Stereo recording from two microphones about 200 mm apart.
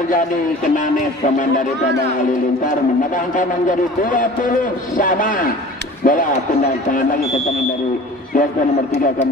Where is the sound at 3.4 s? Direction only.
40° left (ahead or behind).